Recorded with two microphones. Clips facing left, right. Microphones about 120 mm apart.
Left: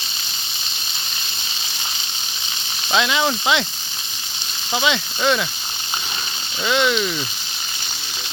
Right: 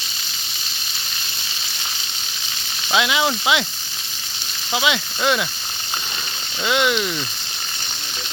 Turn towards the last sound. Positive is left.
turn(degrees=-10)  # may be behind; listen again after turning